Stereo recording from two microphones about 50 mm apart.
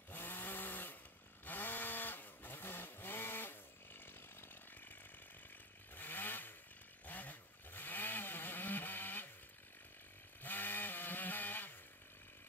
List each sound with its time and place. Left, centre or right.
0.1 s chainsaw: left
5.9 s chainsaw: left
7.1 s vehicle: left
10.4 s chainsaw: left